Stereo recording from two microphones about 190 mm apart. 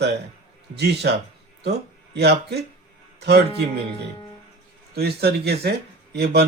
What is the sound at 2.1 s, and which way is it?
A man's voice, 60° right (ahead or behind).